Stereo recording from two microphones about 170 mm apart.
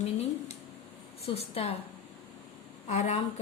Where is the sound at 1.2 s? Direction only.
35° left (ahead or behind).